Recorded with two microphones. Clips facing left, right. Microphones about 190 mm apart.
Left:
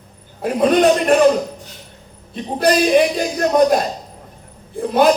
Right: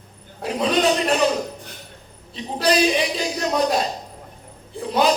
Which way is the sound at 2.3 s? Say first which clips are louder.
Left 4 dB; 50° left (ahead or behind).